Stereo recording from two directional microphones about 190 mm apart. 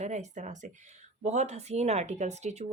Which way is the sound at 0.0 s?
35° right (ahead or behind).